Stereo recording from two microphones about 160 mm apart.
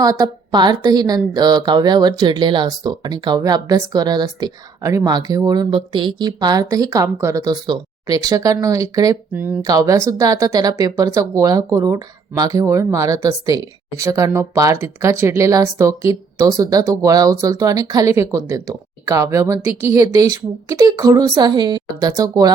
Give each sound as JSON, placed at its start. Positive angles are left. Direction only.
{"t": 0.0, "sound": "speech", "side_deg": -20}
{"t": 9.3, "sound": "speech", "side_deg": -10}
{"t": 9.6, "sound": "speech", "side_deg": -20}